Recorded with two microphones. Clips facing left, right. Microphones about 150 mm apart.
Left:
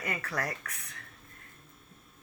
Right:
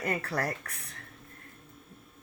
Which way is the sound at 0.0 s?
35° right (ahead or behind).